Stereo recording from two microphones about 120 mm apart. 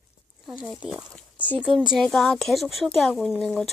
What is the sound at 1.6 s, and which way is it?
Speech, 5° right (ahead or behind).